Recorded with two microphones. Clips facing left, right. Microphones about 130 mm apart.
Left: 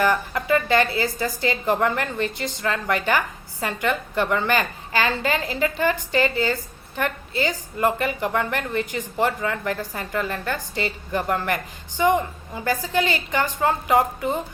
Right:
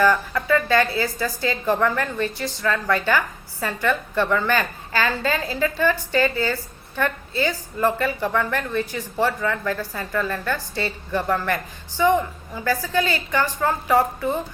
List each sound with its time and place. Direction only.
0.0 s a woman's voice: 20° left (ahead or behind)